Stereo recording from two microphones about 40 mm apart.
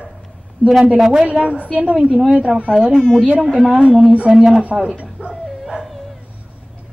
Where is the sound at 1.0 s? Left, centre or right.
Centre.